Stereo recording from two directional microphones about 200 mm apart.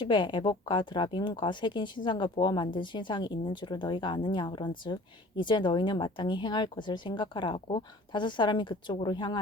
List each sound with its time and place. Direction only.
0.0 s speech: 25° left (ahead or behind)